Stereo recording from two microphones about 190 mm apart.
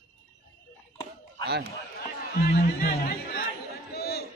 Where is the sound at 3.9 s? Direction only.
55° left (ahead or behind).